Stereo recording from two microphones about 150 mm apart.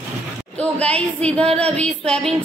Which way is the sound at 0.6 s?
10° left (ahead or behind).